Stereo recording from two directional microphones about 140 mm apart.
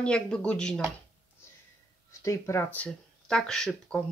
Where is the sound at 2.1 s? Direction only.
20° left (ahead or behind).